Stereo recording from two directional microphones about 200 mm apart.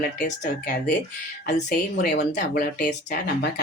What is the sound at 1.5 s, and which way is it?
A woman's voice, 50° left (ahead or behind).